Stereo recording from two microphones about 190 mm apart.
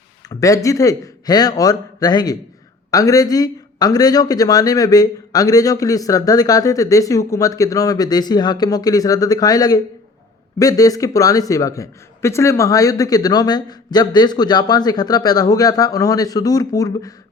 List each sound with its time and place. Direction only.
0.3 s speech: 15° left (ahead or behind)